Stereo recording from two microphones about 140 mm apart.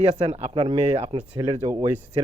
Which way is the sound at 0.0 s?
50° right (ahead or behind).